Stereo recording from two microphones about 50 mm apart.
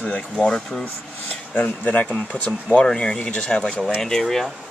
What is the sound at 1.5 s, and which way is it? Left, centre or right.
Speech, left.